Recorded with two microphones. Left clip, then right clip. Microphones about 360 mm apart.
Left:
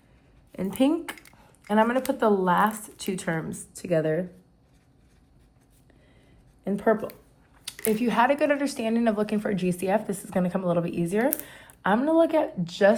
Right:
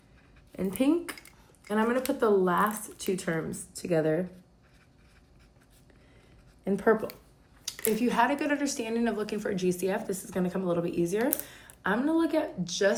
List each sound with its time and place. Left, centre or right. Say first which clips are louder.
0.5 s speech: left 3 dB; centre
6.7 s a woman's voice: left 1 dB; centre